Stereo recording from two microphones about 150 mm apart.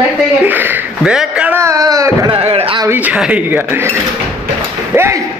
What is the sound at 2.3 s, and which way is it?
Speech, 40° right (ahead or behind).